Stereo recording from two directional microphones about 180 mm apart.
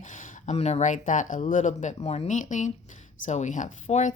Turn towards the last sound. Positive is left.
turn(degrees=40)  # may be behind; listen again after turning